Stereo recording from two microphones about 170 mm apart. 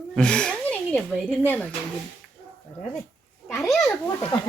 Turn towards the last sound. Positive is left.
turn(degrees=20)  # may be behind; listen again after turning